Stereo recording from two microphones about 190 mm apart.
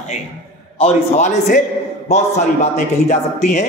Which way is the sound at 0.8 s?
40° left (ahead or behind).